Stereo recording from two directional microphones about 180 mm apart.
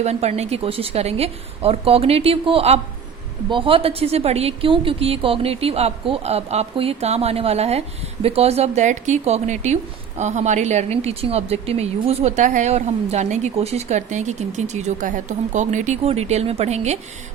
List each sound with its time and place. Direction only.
0.0 s a woman's voice: 35° right (ahead or behind)